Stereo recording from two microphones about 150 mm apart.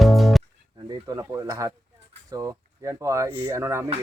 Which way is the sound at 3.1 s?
20° right (ahead or behind).